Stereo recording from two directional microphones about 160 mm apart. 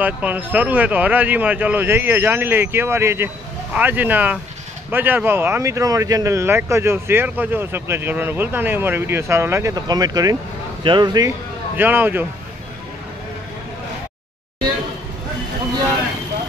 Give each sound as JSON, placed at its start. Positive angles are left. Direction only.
{"t": 0.0, "sound": "a man's voice", "side_deg": -10}
{"t": 11.7, "sound": "speech", "side_deg": -10}